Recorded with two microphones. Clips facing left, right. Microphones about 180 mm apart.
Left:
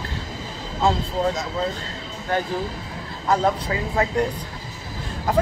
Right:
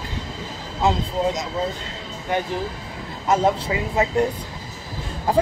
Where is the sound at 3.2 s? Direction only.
20° right (ahead or behind).